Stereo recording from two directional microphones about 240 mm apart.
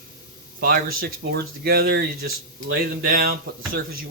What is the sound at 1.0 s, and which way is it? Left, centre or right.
Speech, right.